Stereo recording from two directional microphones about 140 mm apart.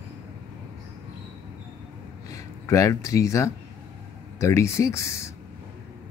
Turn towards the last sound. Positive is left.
turn(degrees=20)  # may be behind; listen again after turning